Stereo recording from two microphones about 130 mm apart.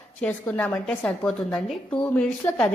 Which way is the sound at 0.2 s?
15° left (ahead or behind).